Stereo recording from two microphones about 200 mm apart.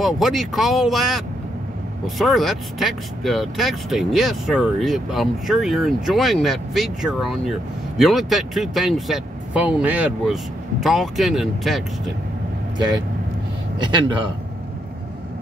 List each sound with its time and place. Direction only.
0.0 s speech: centre (ahead or behind)
13.7 s a man's voice: 25° right (ahead or behind)